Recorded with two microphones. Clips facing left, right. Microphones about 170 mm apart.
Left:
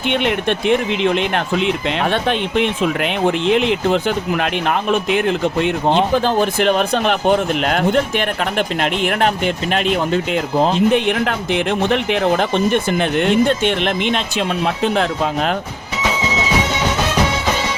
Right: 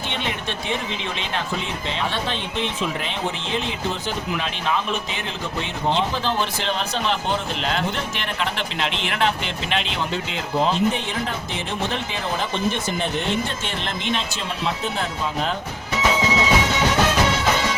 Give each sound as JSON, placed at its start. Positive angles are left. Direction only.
{"t": 0.1, "sound": "speech", "side_deg": 65}
{"t": 10.9, "sound": "speech", "side_deg": 70}